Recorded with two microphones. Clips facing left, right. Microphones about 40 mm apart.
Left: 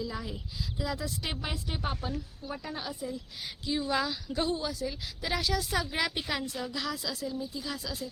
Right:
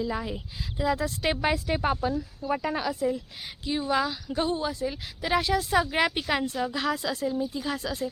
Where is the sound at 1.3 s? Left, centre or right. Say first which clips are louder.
Right 14 dB; right.